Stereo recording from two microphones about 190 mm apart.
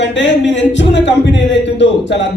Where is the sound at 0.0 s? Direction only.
70° left (ahead or behind).